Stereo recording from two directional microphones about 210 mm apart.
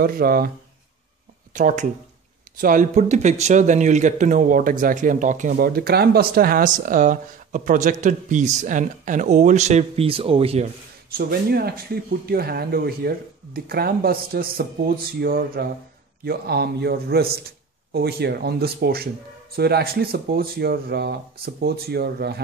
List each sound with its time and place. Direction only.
0.0 s speech: 45° right (ahead or behind)
1.5 s speech: 35° right (ahead or behind)
11.1 s speech: 45° right (ahead or behind)